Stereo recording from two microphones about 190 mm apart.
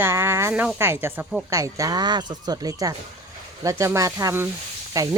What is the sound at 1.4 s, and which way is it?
Speech, 15° right (ahead or behind).